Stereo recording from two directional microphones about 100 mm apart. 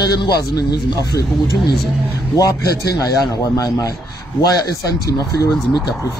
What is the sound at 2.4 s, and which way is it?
Speech, 40° left (ahead or behind).